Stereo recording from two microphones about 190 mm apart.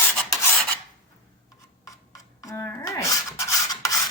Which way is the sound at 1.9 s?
20° left (ahead or behind).